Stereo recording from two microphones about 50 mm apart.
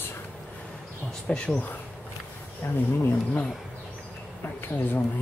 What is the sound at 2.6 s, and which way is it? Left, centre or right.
Speech, left.